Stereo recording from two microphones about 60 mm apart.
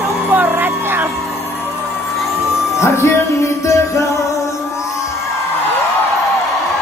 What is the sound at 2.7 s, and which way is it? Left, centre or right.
Music, left.